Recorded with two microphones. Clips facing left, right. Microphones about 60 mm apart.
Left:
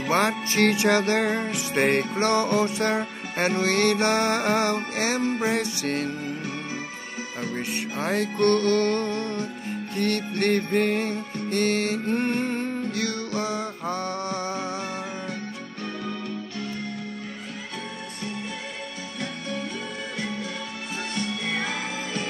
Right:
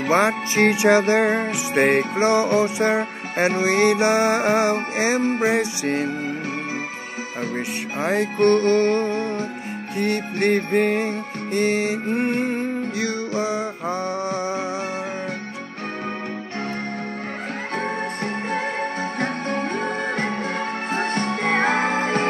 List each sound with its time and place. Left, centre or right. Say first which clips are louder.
0.1 s music: right 4 dB; right
1.9 s music: right 4 dB; centre
8.0 s music: right 4 dB; right
19.1 s music: right 4 dB; right
20.9 s music: right 6 dB; right